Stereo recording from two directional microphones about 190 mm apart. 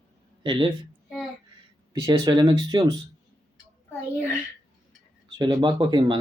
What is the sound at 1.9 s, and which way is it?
Speech, 20° right (ahead or behind).